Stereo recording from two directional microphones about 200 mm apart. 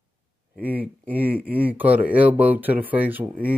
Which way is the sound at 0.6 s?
10° right (ahead or behind).